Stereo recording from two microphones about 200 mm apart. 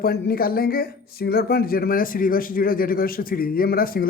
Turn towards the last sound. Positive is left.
turn(degrees=45)  # may be behind; listen again after turning